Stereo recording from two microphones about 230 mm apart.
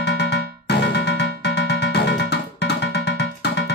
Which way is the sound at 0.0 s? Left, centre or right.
Left.